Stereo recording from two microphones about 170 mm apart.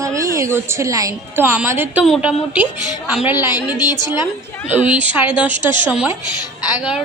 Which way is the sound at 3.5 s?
25° left (ahead or behind).